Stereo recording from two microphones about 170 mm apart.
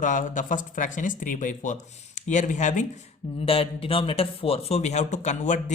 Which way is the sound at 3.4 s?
35° left (ahead or behind).